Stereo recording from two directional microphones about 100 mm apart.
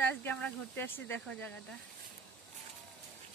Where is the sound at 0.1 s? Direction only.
15° left (ahead or behind).